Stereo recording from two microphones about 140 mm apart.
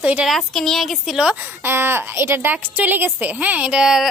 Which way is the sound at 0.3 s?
Centre (ahead or behind).